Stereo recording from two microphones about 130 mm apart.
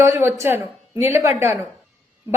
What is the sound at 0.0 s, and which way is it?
Speech, 20° right (ahead or behind).